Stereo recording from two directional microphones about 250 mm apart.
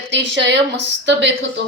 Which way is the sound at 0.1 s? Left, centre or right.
Right.